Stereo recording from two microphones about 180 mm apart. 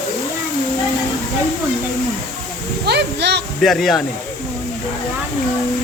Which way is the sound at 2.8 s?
70° right (ahead or behind).